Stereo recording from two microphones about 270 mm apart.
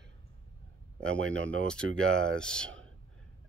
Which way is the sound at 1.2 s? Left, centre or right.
Right.